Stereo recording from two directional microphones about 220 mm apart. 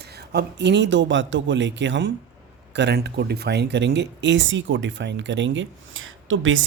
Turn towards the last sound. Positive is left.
turn(degrees=-65)  # may be behind; listen again after turning